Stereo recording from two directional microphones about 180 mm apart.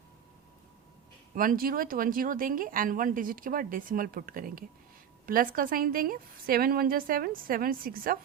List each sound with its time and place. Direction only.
1.4 s speech: 50° right (ahead or behind)